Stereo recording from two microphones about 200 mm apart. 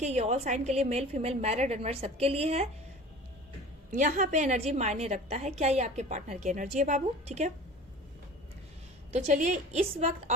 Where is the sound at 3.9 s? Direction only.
40° right (ahead or behind).